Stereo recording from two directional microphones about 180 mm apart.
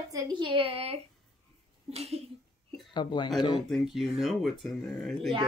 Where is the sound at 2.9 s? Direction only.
25° left (ahead or behind).